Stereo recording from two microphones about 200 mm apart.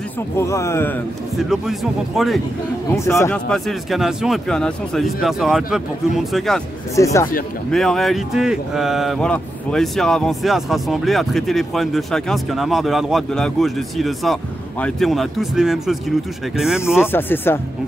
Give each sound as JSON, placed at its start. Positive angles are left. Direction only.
{"t": 0.4, "sound": "speech", "side_deg": 15}
{"t": 1.5, "sound": "speech", "side_deg": 0}
{"t": 2.9, "sound": "speech", "side_deg": 15}
{"t": 7.0, "sound": "speech", "side_deg": 15}
{"t": 7.7, "sound": "speech", "side_deg": 0}
{"t": 17.0, "sound": "speech", "side_deg": 10}